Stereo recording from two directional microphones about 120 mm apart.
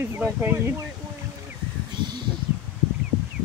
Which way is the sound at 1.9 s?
40° right (ahead or behind).